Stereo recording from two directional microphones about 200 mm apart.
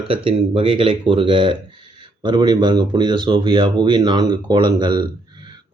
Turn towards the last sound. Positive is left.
turn(degrees=-20)  # may be behind; listen again after turning